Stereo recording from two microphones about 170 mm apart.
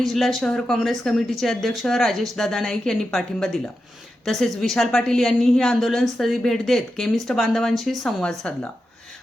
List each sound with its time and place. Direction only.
0.0 s a woman's voice: centre (ahead or behind)